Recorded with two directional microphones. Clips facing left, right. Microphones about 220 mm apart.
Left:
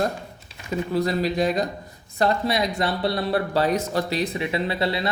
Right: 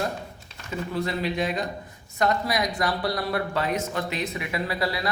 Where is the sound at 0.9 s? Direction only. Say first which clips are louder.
Left 4 dB; 40° left (ahead or behind).